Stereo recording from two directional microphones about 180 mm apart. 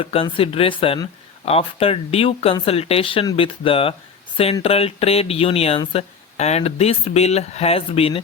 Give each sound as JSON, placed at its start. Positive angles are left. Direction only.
{"t": 0.0, "sound": "speech", "side_deg": 30}